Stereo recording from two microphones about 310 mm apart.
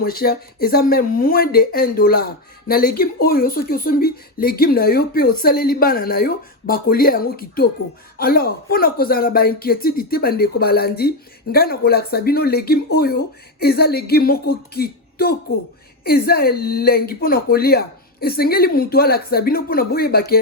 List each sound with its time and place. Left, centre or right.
0.0 s speech: left